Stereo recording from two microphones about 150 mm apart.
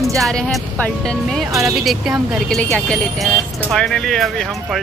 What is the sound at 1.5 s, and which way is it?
Speech, 20° right (ahead or behind).